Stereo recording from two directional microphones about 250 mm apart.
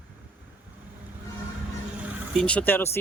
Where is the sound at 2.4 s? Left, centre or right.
Centre.